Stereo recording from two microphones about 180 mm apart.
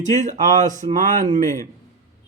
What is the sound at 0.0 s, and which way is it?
Speech, 40° right (ahead or behind).